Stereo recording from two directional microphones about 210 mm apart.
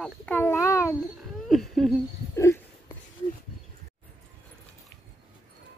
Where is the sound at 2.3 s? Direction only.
15° left (ahead or behind).